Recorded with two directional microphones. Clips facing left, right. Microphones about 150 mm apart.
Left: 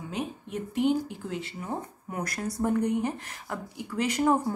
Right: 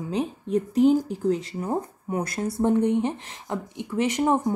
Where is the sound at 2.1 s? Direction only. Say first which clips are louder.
Right 6 dB; 25° right (ahead or behind).